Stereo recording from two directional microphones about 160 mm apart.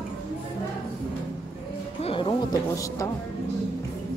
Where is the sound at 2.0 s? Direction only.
35° left (ahead or behind).